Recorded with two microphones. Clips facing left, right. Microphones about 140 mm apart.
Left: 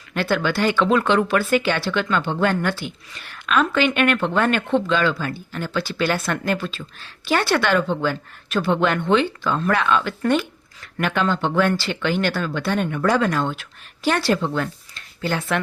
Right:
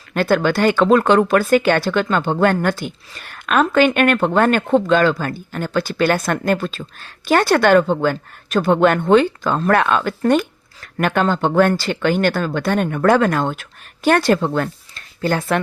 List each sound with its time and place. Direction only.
0.1 s speech: 45° right (ahead or behind)